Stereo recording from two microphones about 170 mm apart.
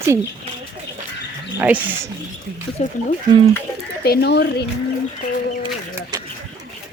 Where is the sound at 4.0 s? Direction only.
70° left (ahead or behind).